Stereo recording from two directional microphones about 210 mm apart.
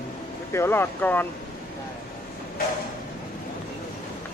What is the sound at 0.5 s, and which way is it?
Speech, 10° left (ahead or behind).